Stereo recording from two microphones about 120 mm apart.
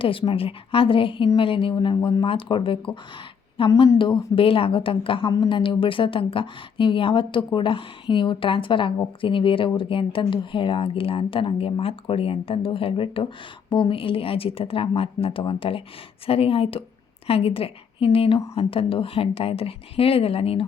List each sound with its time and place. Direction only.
0.0 s a woman's voice: 50° left (ahead or behind)